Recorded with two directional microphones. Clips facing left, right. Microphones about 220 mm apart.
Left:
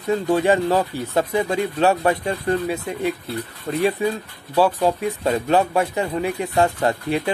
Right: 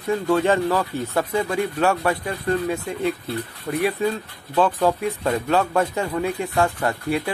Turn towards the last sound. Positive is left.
turn(degrees=25)  # may be behind; listen again after turning